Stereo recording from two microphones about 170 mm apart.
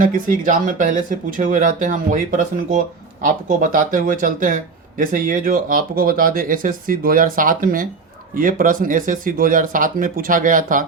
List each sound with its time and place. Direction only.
0.0 s speech: 50° right (ahead or behind)